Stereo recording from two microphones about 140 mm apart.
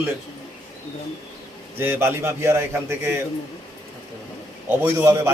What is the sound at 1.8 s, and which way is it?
A man's voice, 15° right (ahead or behind).